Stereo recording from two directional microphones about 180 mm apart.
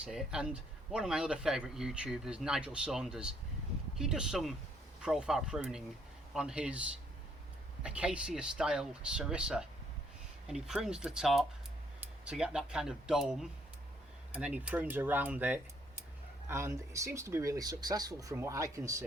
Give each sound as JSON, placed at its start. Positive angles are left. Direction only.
{"t": 0.0, "sound": "speech", "side_deg": -5}